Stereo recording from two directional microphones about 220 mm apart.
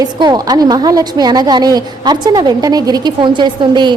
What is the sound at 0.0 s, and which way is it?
A woman's voice, 20° right (ahead or behind).